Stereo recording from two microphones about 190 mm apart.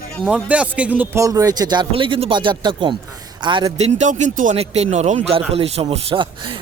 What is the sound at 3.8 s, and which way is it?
Speech, 35° right (ahead or behind).